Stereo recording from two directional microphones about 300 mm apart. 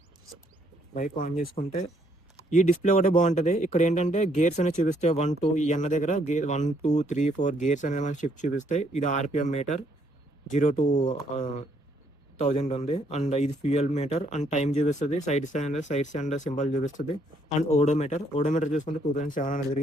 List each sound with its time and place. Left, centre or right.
0.9 s speech: left